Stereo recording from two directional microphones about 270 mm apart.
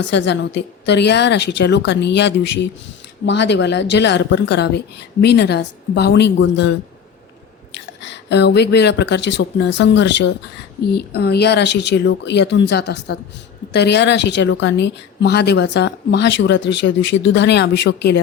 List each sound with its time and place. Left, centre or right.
0.0 s a woman's voice: left